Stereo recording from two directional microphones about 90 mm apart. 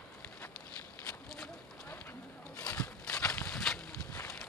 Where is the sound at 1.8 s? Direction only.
20° left (ahead or behind).